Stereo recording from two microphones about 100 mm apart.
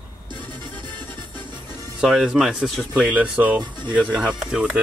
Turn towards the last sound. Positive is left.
turn(degrees=-10)  # may be behind; listen again after turning